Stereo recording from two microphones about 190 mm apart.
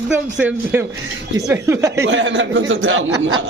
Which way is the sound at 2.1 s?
75° right (ahead or behind).